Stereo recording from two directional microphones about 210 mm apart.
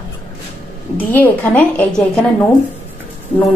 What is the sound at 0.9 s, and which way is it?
A woman's voice, 10° left (ahead or behind).